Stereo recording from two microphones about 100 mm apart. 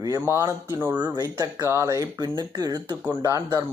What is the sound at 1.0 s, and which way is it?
Speech, 40° right (ahead or behind).